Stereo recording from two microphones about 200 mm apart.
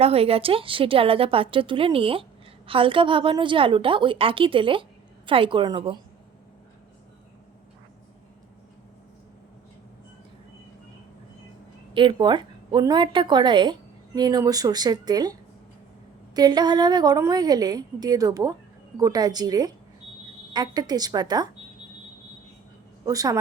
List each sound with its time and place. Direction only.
0.0 s a woman's voice: 30° right (ahead or behind)
11.9 s a woman's voice: 25° right (ahead or behind)
23.0 s a woman's voice: 20° right (ahead or behind)